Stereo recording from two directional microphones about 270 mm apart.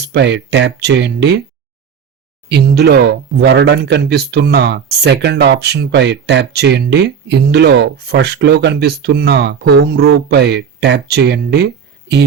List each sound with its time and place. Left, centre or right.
0.1 s speech: right
2.5 s speech: right